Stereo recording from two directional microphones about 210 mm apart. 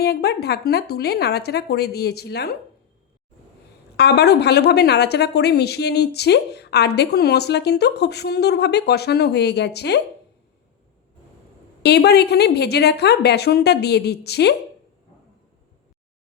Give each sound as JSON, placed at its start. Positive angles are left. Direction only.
{"t": 0.0, "sound": "a woman's voice", "side_deg": 50}
{"t": 3.9, "sound": "a woman's voice", "side_deg": 50}
{"t": 11.8, "sound": "a woman's voice", "side_deg": 50}